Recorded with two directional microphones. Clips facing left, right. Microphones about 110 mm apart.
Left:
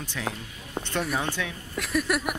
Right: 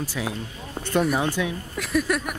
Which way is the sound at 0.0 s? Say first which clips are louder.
Right 4 dB; 10° right (ahead or behind).